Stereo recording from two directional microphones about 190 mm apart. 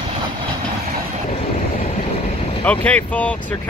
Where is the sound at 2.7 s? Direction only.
5° left (ahead or behind).